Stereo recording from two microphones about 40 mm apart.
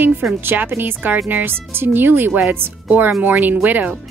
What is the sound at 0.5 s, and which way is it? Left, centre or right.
Speech, right.